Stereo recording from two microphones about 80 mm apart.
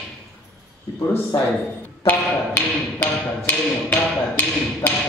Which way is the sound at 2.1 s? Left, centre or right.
Left.